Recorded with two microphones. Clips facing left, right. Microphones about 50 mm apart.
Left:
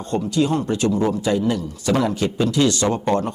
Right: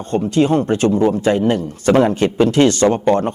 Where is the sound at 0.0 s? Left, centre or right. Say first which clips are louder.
Right 5 dB; right.